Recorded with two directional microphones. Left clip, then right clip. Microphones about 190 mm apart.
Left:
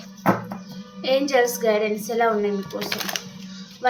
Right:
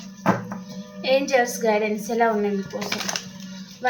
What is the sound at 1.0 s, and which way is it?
A woman's voice, 20° left (ahead or behind).